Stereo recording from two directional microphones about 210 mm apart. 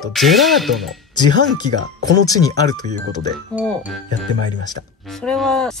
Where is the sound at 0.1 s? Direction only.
Centre (ahead or behind).